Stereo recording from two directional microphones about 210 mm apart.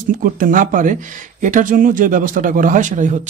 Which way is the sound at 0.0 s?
40° right (ahead or behind).